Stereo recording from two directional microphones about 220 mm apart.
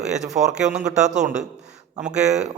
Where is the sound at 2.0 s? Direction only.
5° right (ahead or behind).